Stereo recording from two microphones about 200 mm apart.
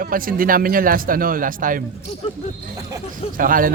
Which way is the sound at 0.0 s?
45° right (ahead or behind).